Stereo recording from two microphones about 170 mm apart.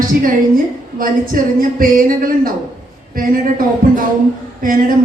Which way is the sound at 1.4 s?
55° right (ahead or behind).